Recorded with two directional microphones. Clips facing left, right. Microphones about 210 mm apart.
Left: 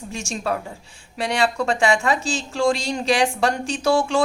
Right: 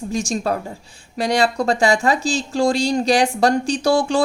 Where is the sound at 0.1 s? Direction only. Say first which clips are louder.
Right 4 dB; 35° right (ahead or behind).